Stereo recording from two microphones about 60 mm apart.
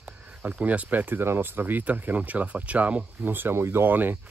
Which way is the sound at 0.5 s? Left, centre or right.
Right.